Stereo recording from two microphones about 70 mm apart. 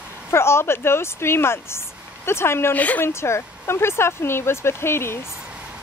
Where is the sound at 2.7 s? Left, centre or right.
Left.